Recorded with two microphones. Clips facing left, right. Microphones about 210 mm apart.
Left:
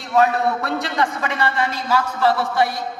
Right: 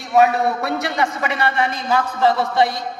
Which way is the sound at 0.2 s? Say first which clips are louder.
Right 2 dB; 10° right (ahead or behind).